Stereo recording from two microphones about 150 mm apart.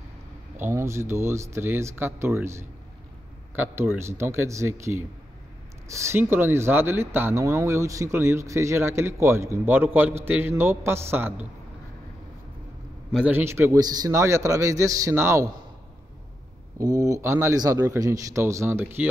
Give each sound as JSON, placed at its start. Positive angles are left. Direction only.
{"t": 0.6, "sound": "speech", "side_deg": -15}
{"t": 13.1, "sound": "a man's voice", "side_deg": -10}
{"t": 16.7, "sound": "a man's voice", "side_deg": -20}